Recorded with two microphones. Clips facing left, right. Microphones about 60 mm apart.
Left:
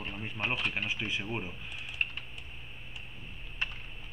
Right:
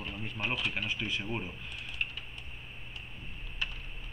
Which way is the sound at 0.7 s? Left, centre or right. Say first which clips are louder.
Left 1 dB; centre.